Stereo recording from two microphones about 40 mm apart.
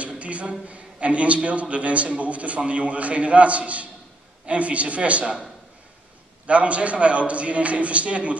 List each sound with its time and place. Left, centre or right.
0.0 s a man's voice: right
6.4 s a man's voice: right